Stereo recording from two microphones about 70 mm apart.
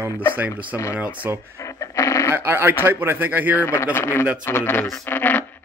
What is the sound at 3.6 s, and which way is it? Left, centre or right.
Speech, left.